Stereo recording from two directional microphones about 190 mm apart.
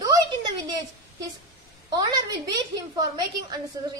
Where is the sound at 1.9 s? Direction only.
20° right (ahead or behind).